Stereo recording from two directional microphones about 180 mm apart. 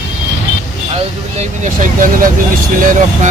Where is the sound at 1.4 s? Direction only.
45° right (ahead or behind).